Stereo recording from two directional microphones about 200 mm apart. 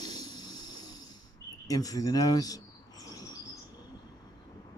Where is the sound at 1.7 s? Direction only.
20° left (ahead or behind).